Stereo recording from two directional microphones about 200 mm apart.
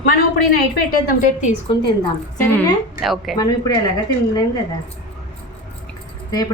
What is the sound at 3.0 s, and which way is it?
Speech, centre (ahead or behind).